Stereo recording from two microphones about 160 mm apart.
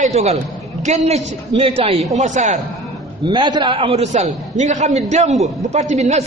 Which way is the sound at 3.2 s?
30° right (ahead or behind).